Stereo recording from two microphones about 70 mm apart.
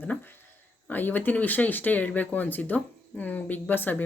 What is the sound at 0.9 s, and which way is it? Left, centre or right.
Speech, left.